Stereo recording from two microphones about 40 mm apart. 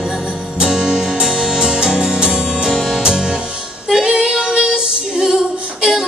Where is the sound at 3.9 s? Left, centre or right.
Centre.